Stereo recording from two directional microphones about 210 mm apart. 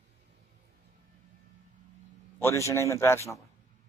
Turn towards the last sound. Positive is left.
turn(degrees=15)  # may be behind; listen again after turning